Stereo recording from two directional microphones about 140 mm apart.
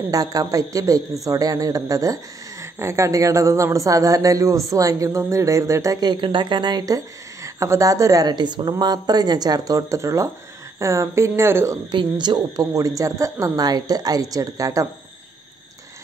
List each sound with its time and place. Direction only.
0.1 s speech: 25° right (ahead or behind)
11.9 s speech: 30° right (ahead or behind)